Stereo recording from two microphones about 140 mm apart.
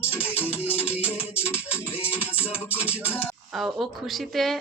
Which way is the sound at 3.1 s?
15° left (ahead or behind).